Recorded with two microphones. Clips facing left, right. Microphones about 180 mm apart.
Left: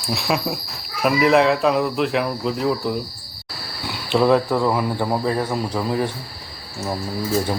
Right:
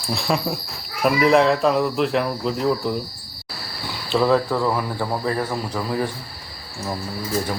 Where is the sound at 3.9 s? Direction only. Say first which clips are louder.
Left 2 dB; 15° left (ahead or behind).